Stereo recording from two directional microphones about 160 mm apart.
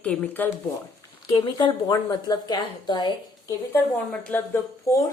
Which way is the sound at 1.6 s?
25° left (ahead or behind).